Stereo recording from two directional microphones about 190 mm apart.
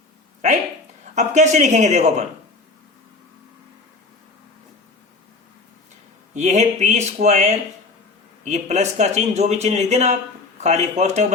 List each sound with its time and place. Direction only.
1.1 s a man's voice: 40° right (ahead or behind)
6.3 s a man's voice: 40° right (ahead or behind)